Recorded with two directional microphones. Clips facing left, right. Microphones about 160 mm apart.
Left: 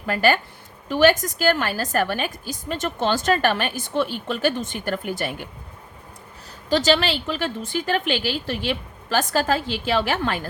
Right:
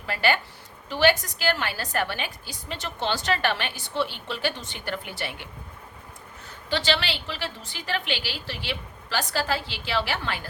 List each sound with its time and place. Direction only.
0.0 s a woman's voice: 45° left (ahead or behind)
6.7 s a woman's voice: 40° left (ahead or behind)